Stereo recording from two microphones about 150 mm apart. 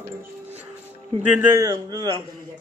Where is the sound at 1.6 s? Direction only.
25° right (ahead or behind).